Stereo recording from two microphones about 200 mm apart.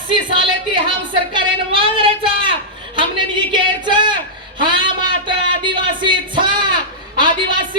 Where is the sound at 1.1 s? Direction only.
25° right (ahead or behind).